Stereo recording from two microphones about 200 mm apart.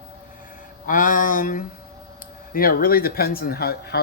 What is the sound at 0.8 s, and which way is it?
Speech, 40° left (ahead or behind).